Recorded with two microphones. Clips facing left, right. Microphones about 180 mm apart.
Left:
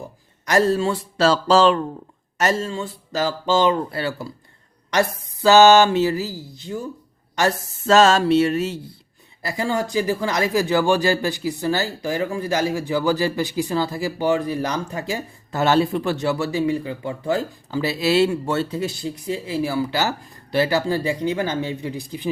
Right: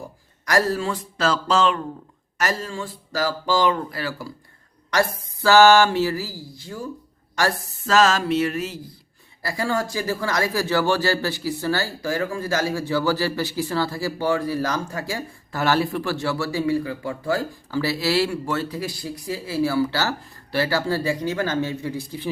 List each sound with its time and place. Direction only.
0.4 s speech: 25° left (ahead or behind)